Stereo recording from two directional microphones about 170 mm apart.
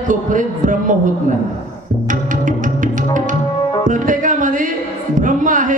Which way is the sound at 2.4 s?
50° right (ahead or behind).